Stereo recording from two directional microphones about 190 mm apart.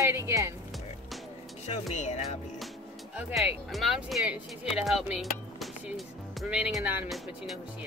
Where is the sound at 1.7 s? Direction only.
35° left (ahead or behind).